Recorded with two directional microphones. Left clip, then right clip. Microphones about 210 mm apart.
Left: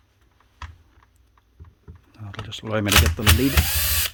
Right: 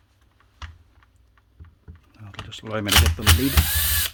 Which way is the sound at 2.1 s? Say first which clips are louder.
Left 3 dB; 20° left (ahead or behind).